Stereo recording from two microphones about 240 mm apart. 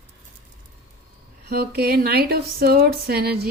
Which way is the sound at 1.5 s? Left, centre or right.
Right.